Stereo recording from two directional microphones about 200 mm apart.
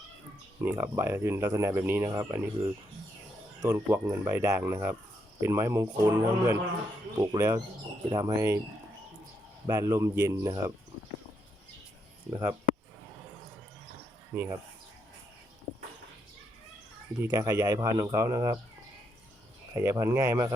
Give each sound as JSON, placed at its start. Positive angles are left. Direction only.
{"t": 0.6, "sound": "speech", "side_deg": -10}
{"t": 9.6, "sound": "speech", "side_deg": -15}
{"t": 12.3, "sound": "speech", "side_deg": -15}
{"t": 14.3, "sound": "speech", "side_deg": -10}
{"t": 17.3, "sound": "speech", "side_deg": -15}
{"t": 19.7, "sound": "speech", "side_deg": -15}